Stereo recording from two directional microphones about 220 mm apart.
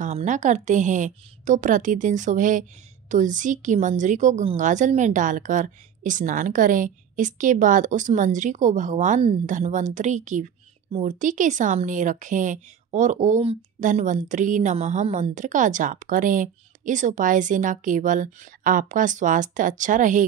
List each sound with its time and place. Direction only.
0.0 s a woman's voice: 35° right (ahead or behind)